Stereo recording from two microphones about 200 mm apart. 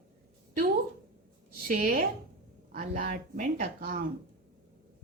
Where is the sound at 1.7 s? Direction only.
45° right (ahead or behind).